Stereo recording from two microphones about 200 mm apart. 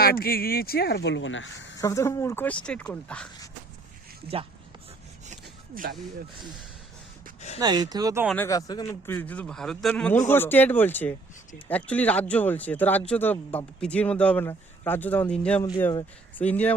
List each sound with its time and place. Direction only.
0.0 s speech: 50° left (ahead or behind); by 1.8 s 70° left (ahead or behind)
1.8 s a man's voice: 15° left (ahead or behind)
5.2 s a sound: 40° right (ahead or behind)
7.6 s speech: 20° right (ahead or behind)
8.4 s a man's voice: 15° left (ahead or behind)